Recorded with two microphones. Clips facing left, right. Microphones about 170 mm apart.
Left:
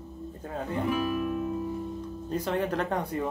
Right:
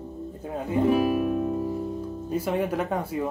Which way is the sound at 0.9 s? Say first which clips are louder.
Right 6 dB; 35° right (ahead or behind).